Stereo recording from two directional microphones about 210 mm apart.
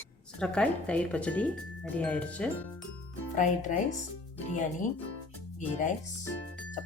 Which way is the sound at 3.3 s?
35° left (ahead or behind).